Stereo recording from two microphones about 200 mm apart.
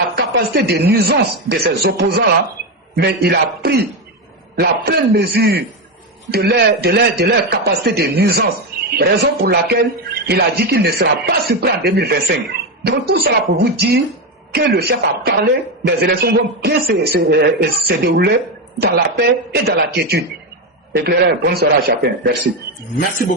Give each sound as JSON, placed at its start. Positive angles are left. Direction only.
{"t": 0.2, "sound": "a man's voice", "side_deg": -55}
{"t": 23.0, "sound": "speech", "side_deg": 45}